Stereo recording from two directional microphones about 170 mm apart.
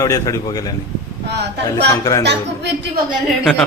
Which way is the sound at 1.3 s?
90° right.